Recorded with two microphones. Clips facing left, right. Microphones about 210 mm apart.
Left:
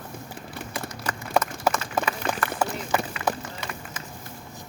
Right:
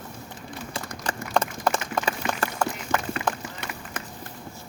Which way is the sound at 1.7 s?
30° right (ahead or behind).